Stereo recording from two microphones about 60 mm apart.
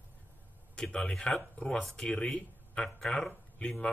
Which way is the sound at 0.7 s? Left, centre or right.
Centre.